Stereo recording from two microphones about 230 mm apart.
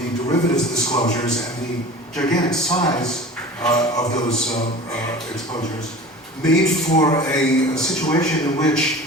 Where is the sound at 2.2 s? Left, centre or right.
Centre.